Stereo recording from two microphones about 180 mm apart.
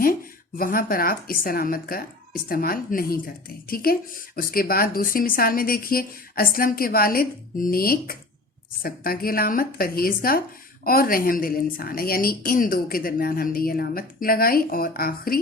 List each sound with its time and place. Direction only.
0.0 s speech: 55° left (ahead or behind)